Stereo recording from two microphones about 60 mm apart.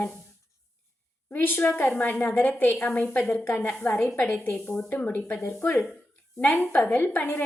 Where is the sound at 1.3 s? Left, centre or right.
Left.